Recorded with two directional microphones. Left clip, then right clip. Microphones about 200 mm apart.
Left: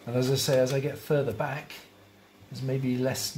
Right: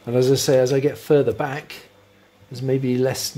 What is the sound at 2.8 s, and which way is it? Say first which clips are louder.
Speech: right 6 dB; 50° right (ahead or behind).